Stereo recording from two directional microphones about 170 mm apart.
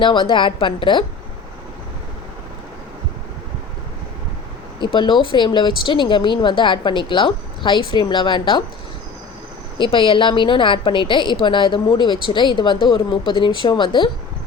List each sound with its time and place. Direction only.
0.0 s a woman's voice: 30° left (ahead or behind)
4.8 s a woman's voice: 25° left (ahead or behind)
9.7 s a woman's voice: 30° left (ahead or behind)